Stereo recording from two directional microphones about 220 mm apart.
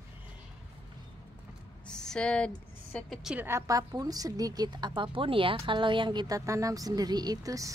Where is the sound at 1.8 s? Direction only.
5° left (ahead or behind).